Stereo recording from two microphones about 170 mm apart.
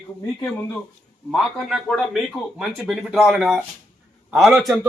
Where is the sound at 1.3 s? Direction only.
Centre (ahead or behind).